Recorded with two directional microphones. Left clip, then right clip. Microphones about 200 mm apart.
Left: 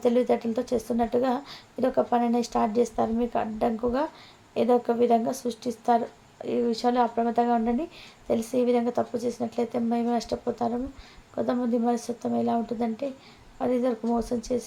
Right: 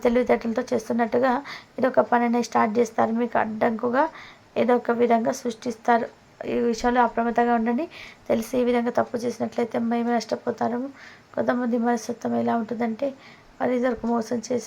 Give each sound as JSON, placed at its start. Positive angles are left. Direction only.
{"t": 0.0, "sound": "speech", "side_deg": -15}